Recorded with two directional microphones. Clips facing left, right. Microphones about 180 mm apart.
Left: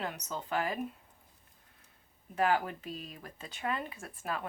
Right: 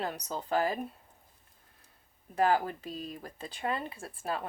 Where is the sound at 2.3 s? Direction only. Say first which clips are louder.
Right 2 dB; 35° right (ahead or behind).